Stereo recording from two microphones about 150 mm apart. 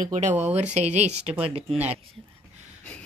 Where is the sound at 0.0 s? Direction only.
55° right (ahead or behind).